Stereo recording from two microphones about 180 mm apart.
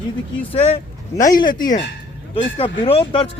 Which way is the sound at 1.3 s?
50° left (ahead or behind).